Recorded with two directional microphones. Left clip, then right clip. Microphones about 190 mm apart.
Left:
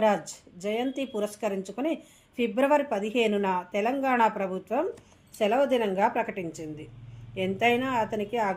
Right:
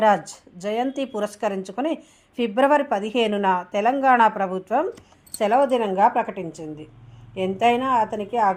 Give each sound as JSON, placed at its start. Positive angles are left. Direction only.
{"t": 0.0, "sound": "a woman's voice", "side_deg": -15}